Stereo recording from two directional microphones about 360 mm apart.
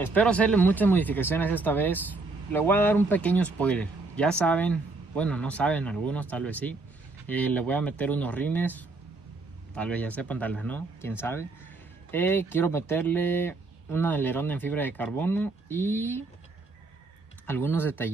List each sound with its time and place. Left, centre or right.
0.0 s speech: centre
17.5 s speech: centre